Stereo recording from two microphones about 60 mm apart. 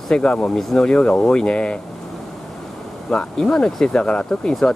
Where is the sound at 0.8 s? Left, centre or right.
Centre.